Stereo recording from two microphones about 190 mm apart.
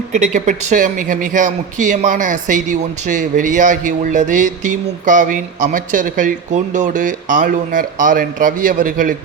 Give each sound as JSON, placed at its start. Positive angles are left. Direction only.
{"t": 0.1, "sound": "speech", "side_deg": -40}